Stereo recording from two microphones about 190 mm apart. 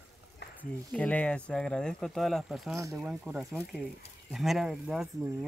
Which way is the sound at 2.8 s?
15° right (ahead or behind).